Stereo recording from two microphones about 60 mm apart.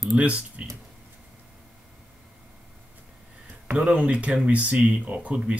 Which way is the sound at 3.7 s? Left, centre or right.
Centre.